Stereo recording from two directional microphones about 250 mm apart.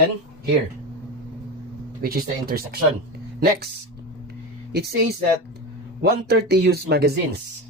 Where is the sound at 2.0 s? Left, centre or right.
Right.